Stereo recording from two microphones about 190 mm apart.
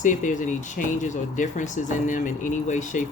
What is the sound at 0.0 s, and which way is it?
Speech, 40° left (ahead or behind).